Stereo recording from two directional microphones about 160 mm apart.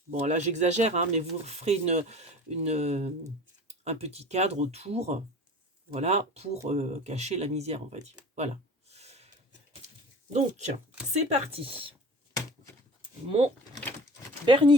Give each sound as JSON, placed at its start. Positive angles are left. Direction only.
{"t": 0.1, "sound": "speech", "side_deg": -45}
{"t": 11.1, "sound": "speech", "side_deg": -45}
{"t": 13.2, "sound": "speech", "side_deg": -35}
{"t": 13.8, "sound": "a sound", "side_deg": 15}
{"t": 14.4, "sound": "speech", "side_deg": -30}